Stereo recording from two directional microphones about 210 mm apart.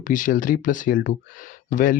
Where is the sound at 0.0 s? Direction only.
40° left (ahead or behind).